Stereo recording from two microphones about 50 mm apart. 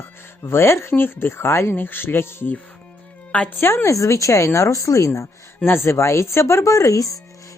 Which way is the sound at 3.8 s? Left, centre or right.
Left.